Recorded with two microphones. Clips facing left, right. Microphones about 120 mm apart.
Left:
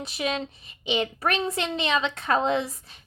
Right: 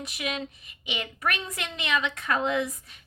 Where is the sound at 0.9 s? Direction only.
30° left (ahead or behind).